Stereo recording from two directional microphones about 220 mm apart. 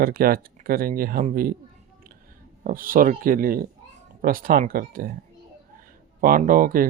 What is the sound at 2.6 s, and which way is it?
Speech, 40° right (ahead or behind).